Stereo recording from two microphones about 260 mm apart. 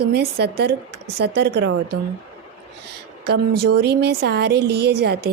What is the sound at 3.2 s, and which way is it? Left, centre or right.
A woman's voice, right.